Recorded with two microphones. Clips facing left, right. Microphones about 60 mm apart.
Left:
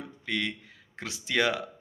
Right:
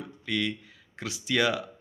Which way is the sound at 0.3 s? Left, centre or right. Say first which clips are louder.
Right 2 dB; left.